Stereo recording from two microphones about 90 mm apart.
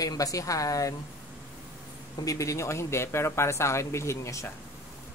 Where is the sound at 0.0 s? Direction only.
40° left (ahead or behind).